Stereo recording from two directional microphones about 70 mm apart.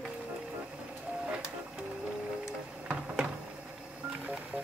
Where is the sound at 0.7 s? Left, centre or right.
Centre.